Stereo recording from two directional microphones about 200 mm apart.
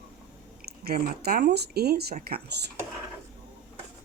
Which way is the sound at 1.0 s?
50° right (ahead or behind).